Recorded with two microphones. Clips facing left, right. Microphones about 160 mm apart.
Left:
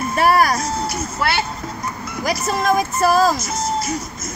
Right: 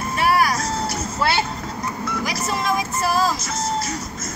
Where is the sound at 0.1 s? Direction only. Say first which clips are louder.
Left 3 dB; 45° left (ahead or behind).